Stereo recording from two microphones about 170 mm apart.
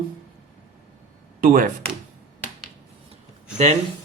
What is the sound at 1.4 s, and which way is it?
Speech, 55° right (ahead or behind).